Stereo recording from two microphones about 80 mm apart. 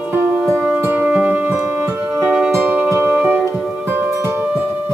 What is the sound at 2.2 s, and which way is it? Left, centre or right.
Music, centre.